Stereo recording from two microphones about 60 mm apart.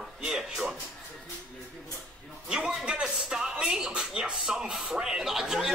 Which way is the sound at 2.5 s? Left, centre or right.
Centre.